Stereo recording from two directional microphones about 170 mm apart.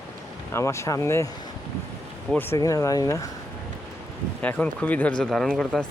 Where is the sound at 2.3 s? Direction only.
10° left (ahead or behind).